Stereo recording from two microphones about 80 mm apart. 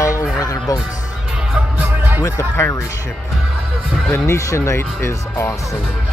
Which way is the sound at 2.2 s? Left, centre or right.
Left.